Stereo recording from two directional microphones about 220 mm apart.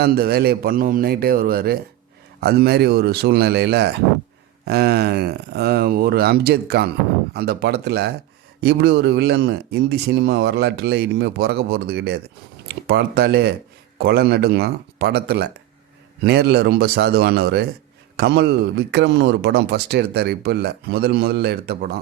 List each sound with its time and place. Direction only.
0.0 s speech: 45° right (ahead or behind)